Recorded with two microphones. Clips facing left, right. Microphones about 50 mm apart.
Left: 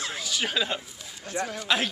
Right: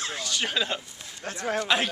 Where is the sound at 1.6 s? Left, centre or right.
Centre.